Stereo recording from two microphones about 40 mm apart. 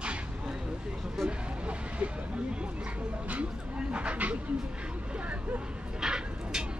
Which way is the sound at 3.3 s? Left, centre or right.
Right.